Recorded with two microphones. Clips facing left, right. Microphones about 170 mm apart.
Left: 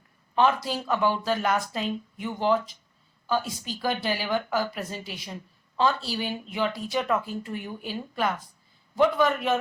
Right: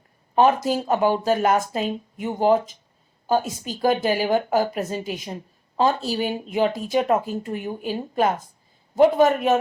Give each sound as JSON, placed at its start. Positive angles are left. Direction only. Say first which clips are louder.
{"t": 0.3, "sound": "a woman's voice", "louder": "right 5 dB", "side_deg": -45}